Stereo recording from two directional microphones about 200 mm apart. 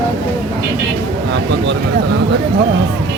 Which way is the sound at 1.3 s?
60° right (ahead or behind).